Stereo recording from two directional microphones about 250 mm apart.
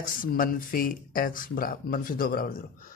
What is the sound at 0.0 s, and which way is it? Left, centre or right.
Speech, left.